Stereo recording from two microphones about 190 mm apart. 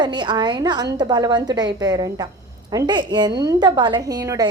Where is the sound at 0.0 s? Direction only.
25° right (ahead or behind).